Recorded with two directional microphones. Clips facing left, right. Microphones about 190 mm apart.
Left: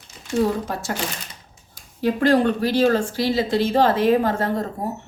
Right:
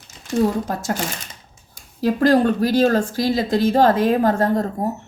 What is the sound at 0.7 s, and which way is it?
A woman's voice, 40° right (ahead or behind).